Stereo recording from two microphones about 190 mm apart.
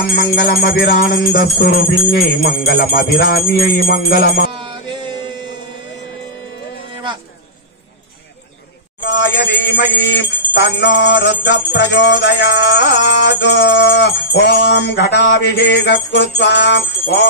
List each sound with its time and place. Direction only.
0.0 s jingle bell: 50° left (ahead or behind)
9.0 s jingle bell: 70° left (ahead or behind)
11.7 s music: 65° left (ahead or behind)